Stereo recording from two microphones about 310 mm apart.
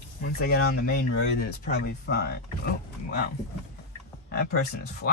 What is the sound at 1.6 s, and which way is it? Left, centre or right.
Speech, left.